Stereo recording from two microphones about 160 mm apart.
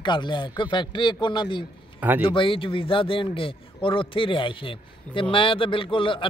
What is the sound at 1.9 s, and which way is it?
Speech, 10° right (ahead or behind).